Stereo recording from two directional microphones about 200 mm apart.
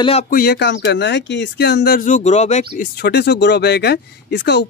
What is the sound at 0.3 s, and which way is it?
Speech, 50° left (ahead or behind).